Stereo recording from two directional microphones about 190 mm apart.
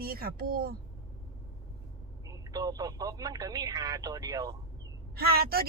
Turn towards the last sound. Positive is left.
turn(degrees=-55)  # may be behind; listen again after turning